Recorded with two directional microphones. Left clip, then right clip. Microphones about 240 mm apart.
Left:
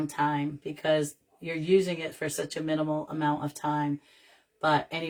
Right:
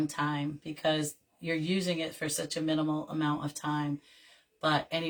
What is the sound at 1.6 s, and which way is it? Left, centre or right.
A woman's voice, centre.